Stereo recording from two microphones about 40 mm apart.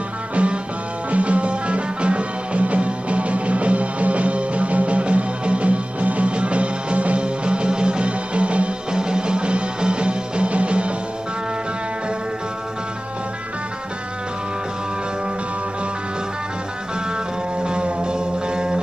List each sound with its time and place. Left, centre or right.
0.4 s music: right
17.6 s music: right